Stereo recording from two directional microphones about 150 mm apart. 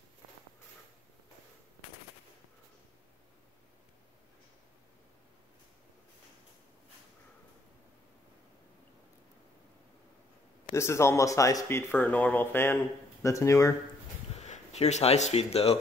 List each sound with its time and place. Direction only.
10.7 s speech: 20° left (ahead or behind)
14.3 s speech: 50° left (ahead or behind)